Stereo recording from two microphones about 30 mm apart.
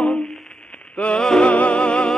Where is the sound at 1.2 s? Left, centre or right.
Left.